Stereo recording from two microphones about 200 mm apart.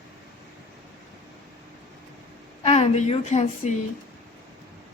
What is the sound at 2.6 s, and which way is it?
Speech, 35° left (ahead or behind).